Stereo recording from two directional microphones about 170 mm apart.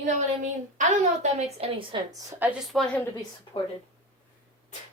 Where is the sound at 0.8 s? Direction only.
45° right (ahead or behind).